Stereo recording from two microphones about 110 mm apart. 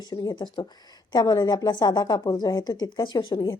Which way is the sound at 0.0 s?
40° left (ahead or behind).